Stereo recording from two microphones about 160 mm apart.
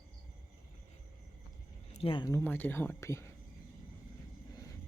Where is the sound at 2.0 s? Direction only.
30° left (ahead or behind).